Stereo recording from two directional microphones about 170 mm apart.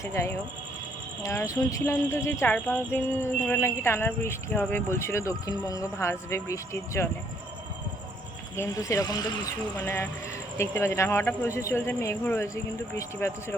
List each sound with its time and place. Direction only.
0.0 s speech: 15° left (ahead or behind)
8.5 s speech: 15° left (ahead or behind)